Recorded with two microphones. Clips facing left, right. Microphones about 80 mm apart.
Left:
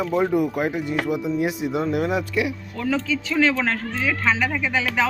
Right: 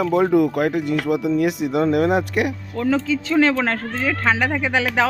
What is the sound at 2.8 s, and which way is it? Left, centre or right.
Speech, right.